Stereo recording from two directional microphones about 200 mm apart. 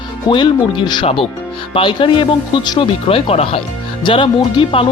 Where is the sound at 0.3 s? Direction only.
25° left (ahead or behind).